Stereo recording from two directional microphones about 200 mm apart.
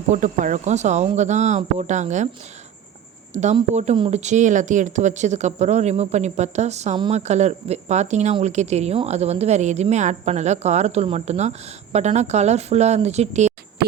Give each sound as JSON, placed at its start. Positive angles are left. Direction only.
{"t": 0.1, "sound": "speech", "side_deg": -40}
{"t": 3.3, "sound": "speech", "side_deg": -35}